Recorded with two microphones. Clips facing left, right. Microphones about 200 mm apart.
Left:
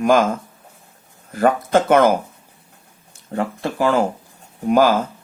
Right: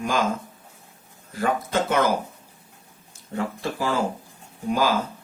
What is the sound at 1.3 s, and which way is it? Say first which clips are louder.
Speech: left 8 dB; 55° left (ahead or behind).